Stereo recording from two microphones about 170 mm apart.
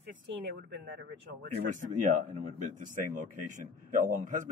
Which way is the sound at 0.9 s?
70° right (ahead or behind).